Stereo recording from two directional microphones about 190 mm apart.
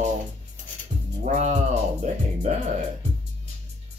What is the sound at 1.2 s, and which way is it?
Speech, 40° right (ahead or behind).